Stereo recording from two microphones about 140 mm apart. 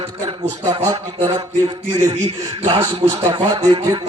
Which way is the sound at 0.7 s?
35° right (ahead or behind).